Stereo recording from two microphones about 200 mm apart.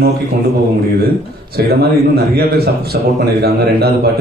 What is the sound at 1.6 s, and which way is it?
Speech, 50° right (ahead or behind).